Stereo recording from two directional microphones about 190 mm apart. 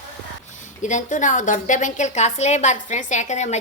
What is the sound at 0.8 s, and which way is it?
A woman's voice, 40° left (ahead or behind).